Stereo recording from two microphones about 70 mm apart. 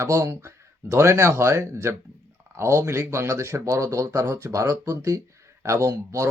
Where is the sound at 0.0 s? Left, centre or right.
Right.